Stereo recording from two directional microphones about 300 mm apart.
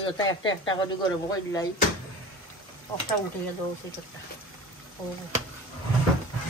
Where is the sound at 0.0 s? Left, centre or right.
Centre.